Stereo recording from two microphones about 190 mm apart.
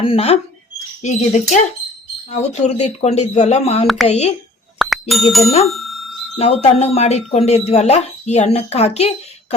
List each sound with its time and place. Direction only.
0.0 s speech: 30° left (ahead or behind)
4.8 s music: centre (ahead or behind)
5.6 s bicycle bell: centre (ahead or behind)
6.4 s speech: 35° left (ahead or behind)